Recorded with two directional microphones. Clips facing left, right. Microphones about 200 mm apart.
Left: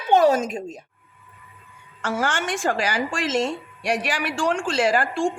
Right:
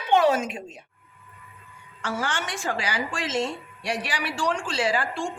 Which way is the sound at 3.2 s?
85° left.